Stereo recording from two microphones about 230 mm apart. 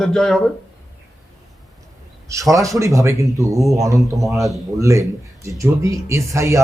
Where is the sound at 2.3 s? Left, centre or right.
Centre.